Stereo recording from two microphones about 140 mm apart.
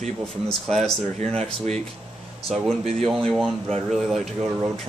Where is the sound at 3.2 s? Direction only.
5° left (ahead or behind).